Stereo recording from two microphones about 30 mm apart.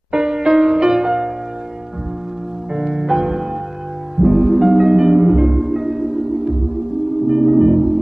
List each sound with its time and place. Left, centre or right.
0.1 s music: right
2.8 s music: centre